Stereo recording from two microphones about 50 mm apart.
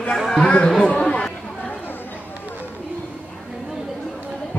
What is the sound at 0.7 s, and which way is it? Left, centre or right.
Speech, centre.